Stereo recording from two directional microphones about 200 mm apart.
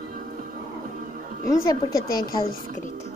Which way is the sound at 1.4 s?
15° left (ahead or behind).